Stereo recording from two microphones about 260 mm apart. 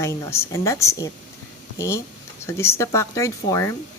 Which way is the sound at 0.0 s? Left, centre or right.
Centre.